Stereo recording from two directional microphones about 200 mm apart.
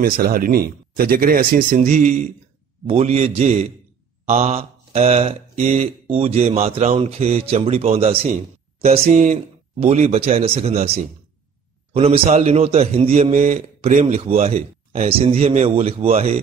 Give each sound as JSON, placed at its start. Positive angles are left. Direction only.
{"t": 0.0, "sound": "a man's voice", "side_deg": -45}
{"t": 11.9, "sound": "a man's voice", "side_deg": -30}